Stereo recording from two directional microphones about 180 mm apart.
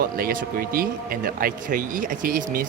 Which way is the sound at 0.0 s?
55° right (ahead or behind).